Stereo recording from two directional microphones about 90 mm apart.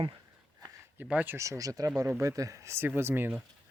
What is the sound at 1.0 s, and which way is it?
Speech, 20° right (ahead or behind).